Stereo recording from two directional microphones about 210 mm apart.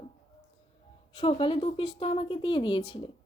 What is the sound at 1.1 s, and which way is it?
A woman's voice, 25° left (ahead or behind).